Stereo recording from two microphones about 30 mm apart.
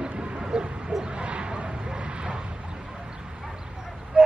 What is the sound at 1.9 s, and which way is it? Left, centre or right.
Vehicle, right.